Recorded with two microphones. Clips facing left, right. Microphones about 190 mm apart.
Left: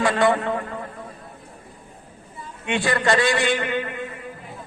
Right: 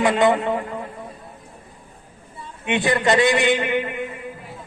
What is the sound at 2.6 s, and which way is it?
A man's voice, 20° right (ahead or behind).